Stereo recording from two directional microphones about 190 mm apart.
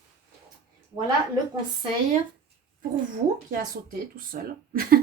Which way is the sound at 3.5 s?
45° right (ahead or behind).